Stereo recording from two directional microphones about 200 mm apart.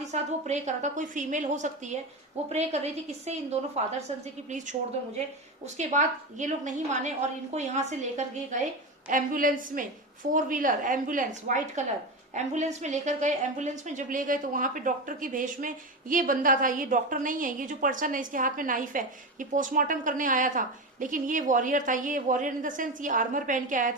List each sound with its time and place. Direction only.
0.0 s a woman's voice: 35° right (ahead or behind)